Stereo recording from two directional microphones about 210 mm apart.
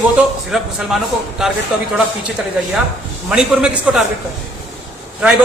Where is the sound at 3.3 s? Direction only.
5° right (ahead or behind).